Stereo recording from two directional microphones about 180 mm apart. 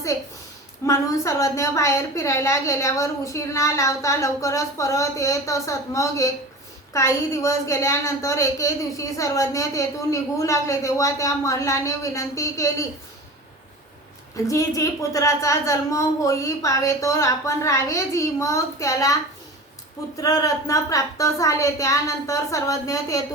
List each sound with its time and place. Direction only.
0.9 s a woman's voice: 15° left (ahead or behind)
14.4 s a woman's voice: 15° left (ahead or behind)
20.1 s a woman's voice: 20° left (ahead or behind)